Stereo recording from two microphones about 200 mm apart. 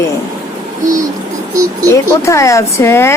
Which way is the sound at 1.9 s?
15° left (ahead or behind).